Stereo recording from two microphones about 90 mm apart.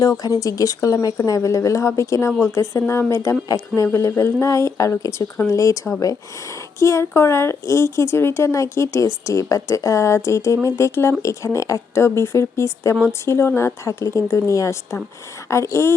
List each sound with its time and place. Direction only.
0.0 s a woman's voice: 40° left (ahead or behind)